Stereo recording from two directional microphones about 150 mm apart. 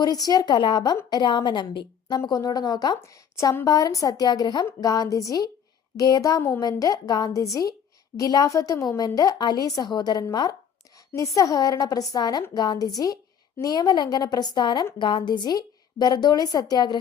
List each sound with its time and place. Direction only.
0.0 s a woman's voice: 25° left (ahead or behind)